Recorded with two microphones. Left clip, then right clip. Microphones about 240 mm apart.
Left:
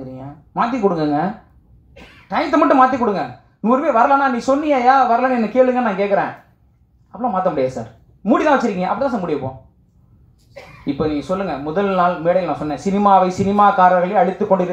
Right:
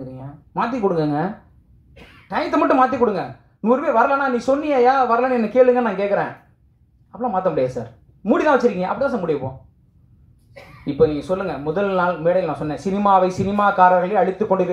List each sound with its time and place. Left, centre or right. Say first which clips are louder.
0.1 s speech: left 2 dB; right
2.2 s speech: left 3 dB; right
10.6 s a sound: left 4 dB; centre
11.0 s speech: right 3 dB; right